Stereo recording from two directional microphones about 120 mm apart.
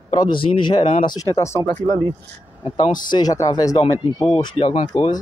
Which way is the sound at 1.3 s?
25° left (ahead or behind).